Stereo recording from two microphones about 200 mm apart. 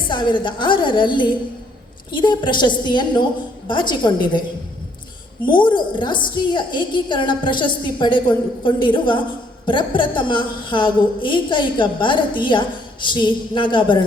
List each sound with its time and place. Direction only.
0.1 s a woman's voice: 25° left (ahead or behind)
5.5 s a woman's voice: 25° left (ahead or behind)